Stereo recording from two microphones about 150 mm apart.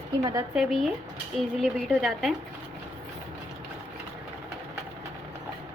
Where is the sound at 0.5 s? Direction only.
Centre (ahead or behind).